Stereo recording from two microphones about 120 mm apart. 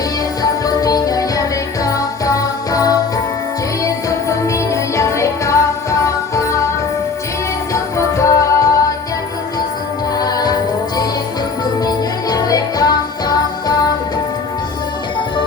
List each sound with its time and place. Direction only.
0.4 s music: 30° left (ahead or behind)
4.3 s music: 25° left (ahead or behind)
7.7 s music: 25° left (ahead or behind)
10.2 s music: 30° left (ahead or behind)